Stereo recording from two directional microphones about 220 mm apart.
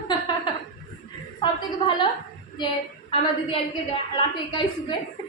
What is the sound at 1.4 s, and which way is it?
Speech, 20° left (ahead or behind).